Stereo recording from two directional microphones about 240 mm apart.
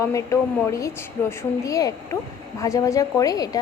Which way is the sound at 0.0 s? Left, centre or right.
Centre.